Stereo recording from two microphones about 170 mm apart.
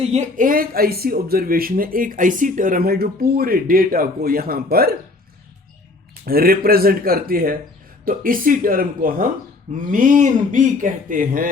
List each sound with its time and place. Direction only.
0.0 s speech: 40° right (ahead or behind); by 4.9 s 60° right (ahead or behind)
6.2 s a man's voice: 60° right (ahead or behind)